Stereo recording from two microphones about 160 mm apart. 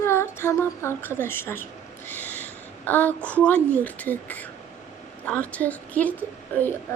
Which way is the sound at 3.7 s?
10° left (ahead or behind).